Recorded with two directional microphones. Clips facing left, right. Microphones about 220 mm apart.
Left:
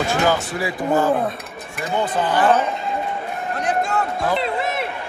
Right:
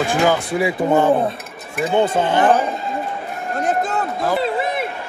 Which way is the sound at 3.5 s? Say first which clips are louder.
Right 3 dB; 45° right (ahead or behind).